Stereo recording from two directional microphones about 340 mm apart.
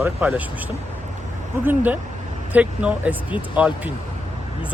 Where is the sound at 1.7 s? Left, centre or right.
Centre.